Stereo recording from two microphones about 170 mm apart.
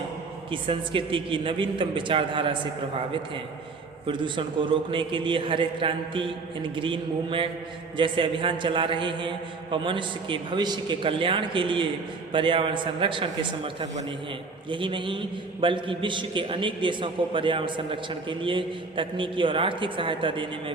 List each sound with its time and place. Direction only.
0.5 s a man's voice: 30° right (ahead or behind)
4.0 s a man's voice: 30° right (ahead or behind)